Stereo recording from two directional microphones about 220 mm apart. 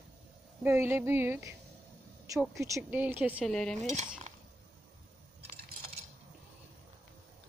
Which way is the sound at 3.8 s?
30° right (ahead or behind).